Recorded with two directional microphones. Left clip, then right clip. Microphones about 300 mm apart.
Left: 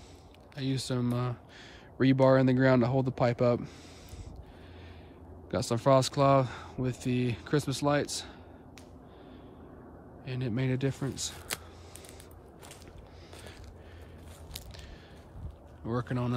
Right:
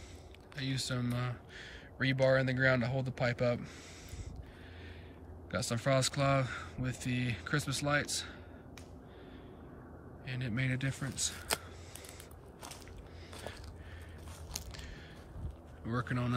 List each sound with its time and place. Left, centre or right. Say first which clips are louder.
0.6 s speech: left 4 dB; centre
5.5 s speech: left 7 dB; centre
10.2 s speech: left 4 dB; centre
15.9 s speech: left 3 dB; centre